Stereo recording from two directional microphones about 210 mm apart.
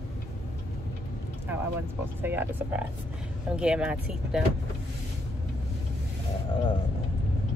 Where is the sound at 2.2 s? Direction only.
10° right (ahead or behind).